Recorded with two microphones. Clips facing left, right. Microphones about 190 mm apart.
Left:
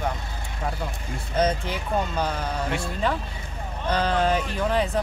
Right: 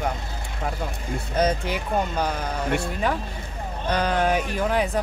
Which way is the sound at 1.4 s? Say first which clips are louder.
Right 1 dB; 10° right (ahead or behind).